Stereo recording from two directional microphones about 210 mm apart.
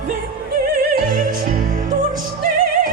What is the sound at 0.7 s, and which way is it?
Opera, 45° right (ahead or behind).